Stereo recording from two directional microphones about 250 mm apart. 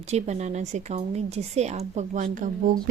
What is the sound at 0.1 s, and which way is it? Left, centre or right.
Speech, right.